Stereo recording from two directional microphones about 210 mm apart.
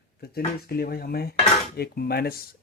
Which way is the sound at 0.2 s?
45° left (ahead or behind).